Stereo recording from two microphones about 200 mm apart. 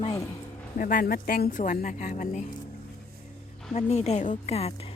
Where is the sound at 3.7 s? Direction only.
35° left (ahead or behind).